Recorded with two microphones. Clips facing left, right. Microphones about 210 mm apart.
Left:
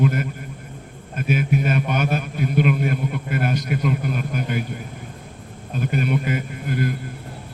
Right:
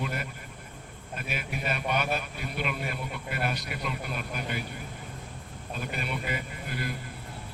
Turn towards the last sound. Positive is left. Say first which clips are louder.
# left 11 dB
turn(degrees=50)  # may be behind; listen again after turning